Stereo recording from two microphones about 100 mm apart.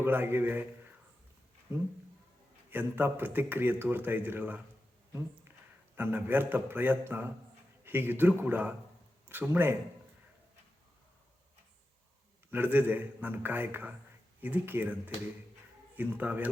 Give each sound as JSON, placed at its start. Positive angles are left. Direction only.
{"t": 0.0, "sound": "a man's voice", "side_deg": -20}
{"t": 2.6, "sound": "a man's voice", "side_deg": -20}
{"t": 5.1, "sound": "a sound", "side_deg": -25}
{"t": 6.0, "sound": "a man's voice", "side_deg": -20}
{"t": 12.5, "sound": "a man's voice", "side_deg": -20}